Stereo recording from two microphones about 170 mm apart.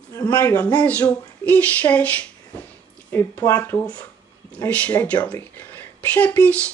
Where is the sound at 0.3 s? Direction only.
10° left (ahead or behind).